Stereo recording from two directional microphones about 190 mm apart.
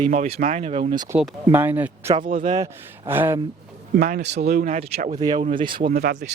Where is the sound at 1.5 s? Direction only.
10° right (ahead or behind).